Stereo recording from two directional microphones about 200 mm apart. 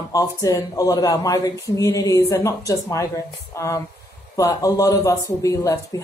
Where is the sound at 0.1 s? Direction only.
15° left (ahead or behind).